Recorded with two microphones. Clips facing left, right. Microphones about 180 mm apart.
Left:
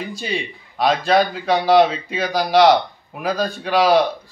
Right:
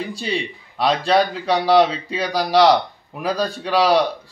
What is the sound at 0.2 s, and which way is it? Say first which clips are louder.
A man's voice: right 1 dB; 30° right (ahead or behind).